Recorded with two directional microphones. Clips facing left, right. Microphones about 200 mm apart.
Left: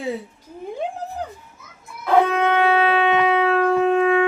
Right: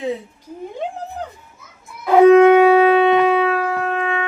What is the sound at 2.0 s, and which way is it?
Shofar, 10° right (ahead or behind).